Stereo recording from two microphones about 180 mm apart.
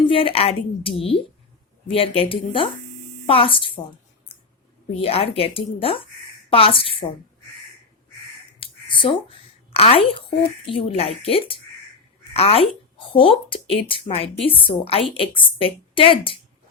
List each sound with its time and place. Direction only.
0.0 s a woman's voice: 30° left (ahead or behind)
4.9 s a woman's voice: 30° left (ahead or behind)
8.6 s a sound: 30° left (ahead or behind)
9.7 s a woman's voice: 35° left (ahead or behind)